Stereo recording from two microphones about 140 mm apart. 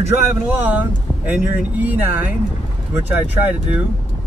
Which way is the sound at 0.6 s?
10° right (ahead or behind).